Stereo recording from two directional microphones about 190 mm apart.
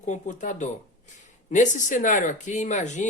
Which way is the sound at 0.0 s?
40° left (ahead or behind).